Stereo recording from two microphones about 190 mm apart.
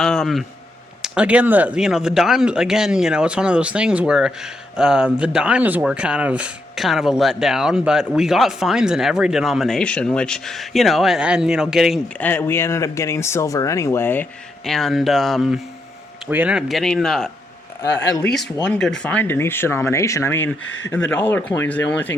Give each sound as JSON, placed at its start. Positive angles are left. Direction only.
{"t": 0.0, "sound": "speech", "side_deg": 5}
{"t": 12.2, "sound": "speech", "side_deg": 10}
{"t": 20.7, "sound": "speech", "side_deg": 85}
{"t": 21.1, "sound": "speech", "side_deg": 10}